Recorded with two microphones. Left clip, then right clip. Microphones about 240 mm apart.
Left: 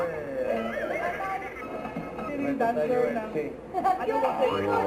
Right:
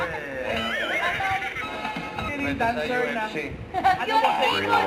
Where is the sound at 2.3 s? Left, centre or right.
Centre.